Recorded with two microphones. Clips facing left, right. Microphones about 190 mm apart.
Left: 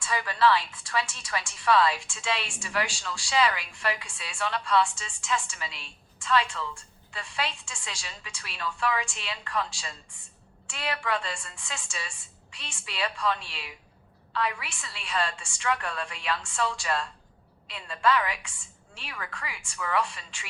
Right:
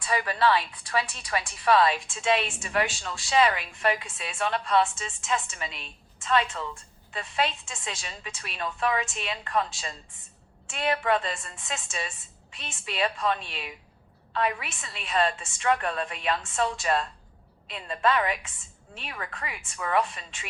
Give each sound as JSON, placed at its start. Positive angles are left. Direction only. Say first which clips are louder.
{"t": 0.0, "sound": "a woman's voice", "louder": "even", "side_deg": -25}
{"t": 16.9, "sound": "speech", "louder": "right 6 dB", "side_deg": -30}
{"t": 17.7, "sound": "a woman's voice", "louder": "even", "side_deg": -20}